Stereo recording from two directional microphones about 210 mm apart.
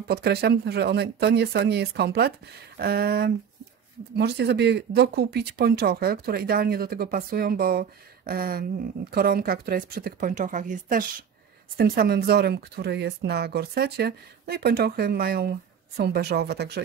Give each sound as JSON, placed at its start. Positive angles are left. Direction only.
{"t": 0.1, "sound": "speech", "side_deg": -50}